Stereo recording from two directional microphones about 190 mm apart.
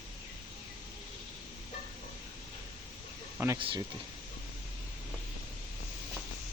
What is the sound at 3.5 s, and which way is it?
Speech, 25° right (ahead or behind).